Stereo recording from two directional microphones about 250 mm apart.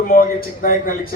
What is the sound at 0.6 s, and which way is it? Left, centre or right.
Speech, left.